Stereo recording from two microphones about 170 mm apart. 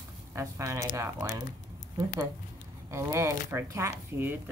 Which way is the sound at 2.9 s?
15° right (ahead or behind).